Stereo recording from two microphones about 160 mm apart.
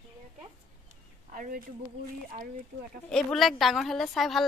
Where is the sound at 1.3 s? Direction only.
55° right (ahead or behind).